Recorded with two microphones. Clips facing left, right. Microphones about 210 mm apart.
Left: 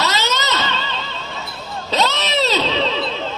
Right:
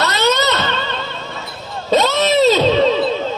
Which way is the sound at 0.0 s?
60° right (ahead or behind).